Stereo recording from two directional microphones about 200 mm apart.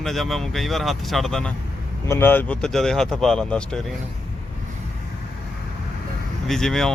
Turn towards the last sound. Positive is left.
turn(degrees=0)  # may be behind; listen again after turning